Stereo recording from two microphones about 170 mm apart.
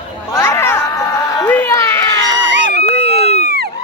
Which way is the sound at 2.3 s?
90° right.